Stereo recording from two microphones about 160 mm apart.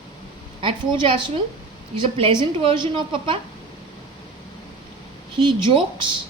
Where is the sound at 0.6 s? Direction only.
30° right (ahead or behind).